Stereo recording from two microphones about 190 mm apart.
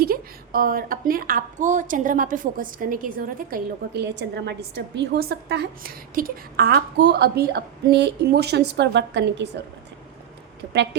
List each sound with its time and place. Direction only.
0.0 s a woman's voice: 50° right (ahead or behind)